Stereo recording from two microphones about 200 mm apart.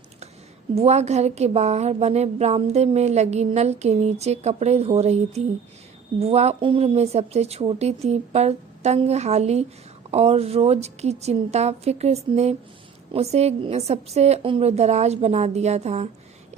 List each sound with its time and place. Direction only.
0.8 s speech: 35° right (ahead or behind)